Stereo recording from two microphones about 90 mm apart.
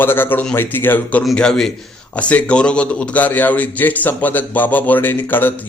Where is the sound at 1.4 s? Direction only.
10° left (ahead or behind).